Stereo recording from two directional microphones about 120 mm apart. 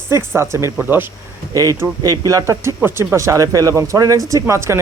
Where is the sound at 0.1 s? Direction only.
20° right (ahead or behind).